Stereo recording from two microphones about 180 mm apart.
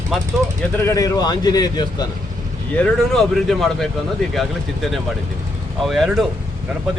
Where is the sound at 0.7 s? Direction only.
15° left (ahead or behind).